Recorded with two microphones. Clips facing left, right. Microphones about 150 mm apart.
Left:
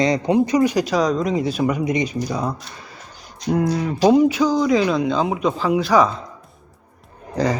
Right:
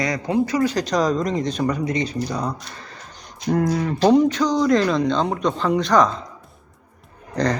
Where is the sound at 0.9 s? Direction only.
Centre (ahead or behind).